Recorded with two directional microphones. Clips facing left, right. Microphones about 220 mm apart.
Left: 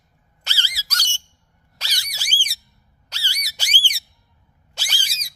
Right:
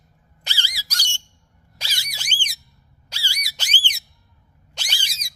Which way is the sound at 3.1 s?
10° right (ahead or behind).